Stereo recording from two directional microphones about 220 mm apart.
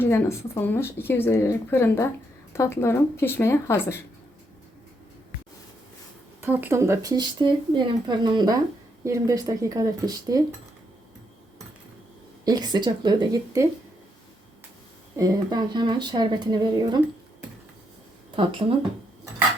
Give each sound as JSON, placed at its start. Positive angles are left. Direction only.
{"t": 0.0, "sound": "speech", "side_deg": 10}
{"t": 6.4, "sound": "speech", "side_deg": -10}
{"t": 12.5, "sound": "speech", "side_deg": -20}
{"t": 15.1, "sound": "speech", "side_deg": -15}